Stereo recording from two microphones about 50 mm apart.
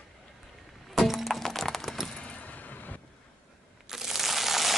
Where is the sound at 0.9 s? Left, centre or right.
Centre.